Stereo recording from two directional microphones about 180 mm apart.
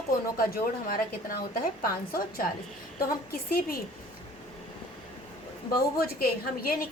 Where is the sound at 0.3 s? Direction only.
55° left (ahead or behind).